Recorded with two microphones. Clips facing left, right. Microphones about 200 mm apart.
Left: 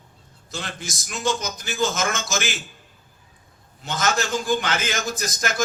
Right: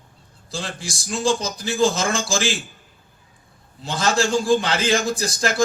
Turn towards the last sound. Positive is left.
turn(degrees=-30)  # may be behind; listen again after turning